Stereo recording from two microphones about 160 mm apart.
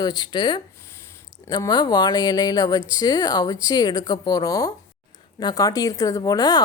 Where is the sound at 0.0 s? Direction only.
25° left (ahead or behind).